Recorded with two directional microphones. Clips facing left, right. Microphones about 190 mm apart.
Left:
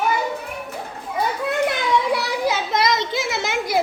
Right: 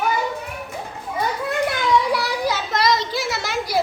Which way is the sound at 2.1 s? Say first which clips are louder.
Left 1 dB; 20° left (ahead or behind).